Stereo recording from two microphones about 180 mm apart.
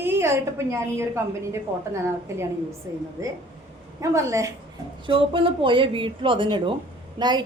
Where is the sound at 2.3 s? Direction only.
15° right (ahead or behind).